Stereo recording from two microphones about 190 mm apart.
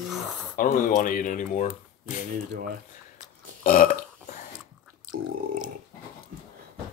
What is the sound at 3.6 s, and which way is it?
Burping, 50° left (ahead or behind).